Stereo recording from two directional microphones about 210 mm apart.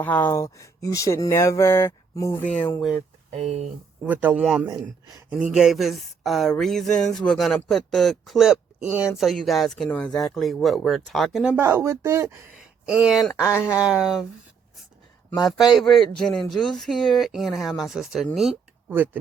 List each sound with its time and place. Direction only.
0.0 s speech: 10° left (ahead or behind)
3.3 s speech: 30° right (ahead or behind)
4.0 s speech: 10° right (ahead or behind)
4.6 s speech: 20° right (ahead or behind)
5.3 s speech: 5° right (ahead or behind)
12.9 s speech: 5° right (ahead or behind)
15.4 s speech: centre (ahead or behind)